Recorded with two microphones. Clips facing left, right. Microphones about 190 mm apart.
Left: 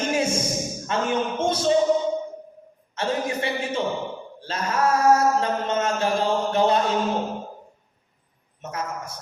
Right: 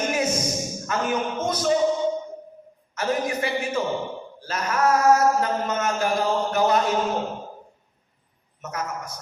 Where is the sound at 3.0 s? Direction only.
25° left (ahead or behind).